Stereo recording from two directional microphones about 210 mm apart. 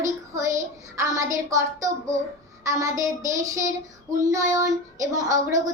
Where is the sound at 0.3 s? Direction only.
15° right (ahead or behind).